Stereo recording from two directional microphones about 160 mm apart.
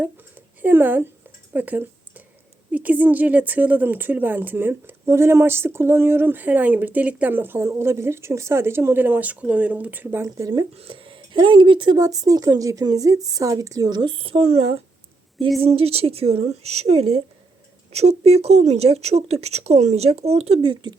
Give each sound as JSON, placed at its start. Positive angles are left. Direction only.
{"t": 0.0, "sound": "a sound", "side_deg": -10}
{"t": 2.7, "sound": "speech", "side_deg": -10}
{"t": 10.8, "sound": "speech", "side_deg": -35}